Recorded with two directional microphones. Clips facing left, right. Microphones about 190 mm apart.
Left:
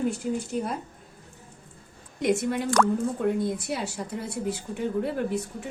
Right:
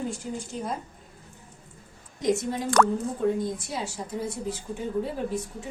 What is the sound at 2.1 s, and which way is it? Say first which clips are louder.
Speech: left 1 dB; 65° left (ahead or behind).